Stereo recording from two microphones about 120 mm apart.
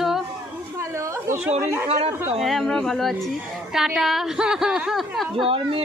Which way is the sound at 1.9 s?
55° right (ahead or behind).